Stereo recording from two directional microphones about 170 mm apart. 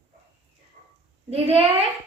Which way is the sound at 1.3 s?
35° right (ahead or behind).